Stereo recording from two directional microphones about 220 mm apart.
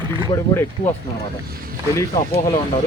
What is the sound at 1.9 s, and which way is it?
Speech, 15° left (ahead or behind).